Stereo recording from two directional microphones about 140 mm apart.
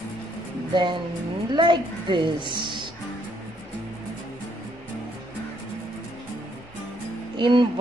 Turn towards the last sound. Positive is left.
turn(degrees=-35)  # may be behind; listen again after turning